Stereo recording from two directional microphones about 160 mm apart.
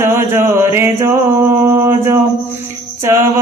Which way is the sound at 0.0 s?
15° right (ahead or behind).